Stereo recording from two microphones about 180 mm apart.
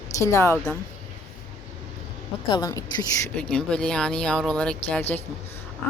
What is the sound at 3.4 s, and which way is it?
Speech, 5° left (ahead or behind).